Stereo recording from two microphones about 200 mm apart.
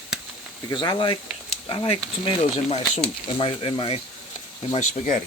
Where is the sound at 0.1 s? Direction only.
5° right (ahead or behind).